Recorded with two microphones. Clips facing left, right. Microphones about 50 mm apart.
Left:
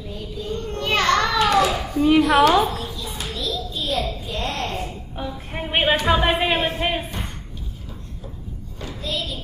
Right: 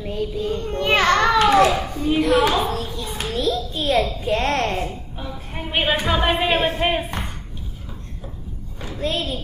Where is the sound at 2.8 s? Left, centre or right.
Right.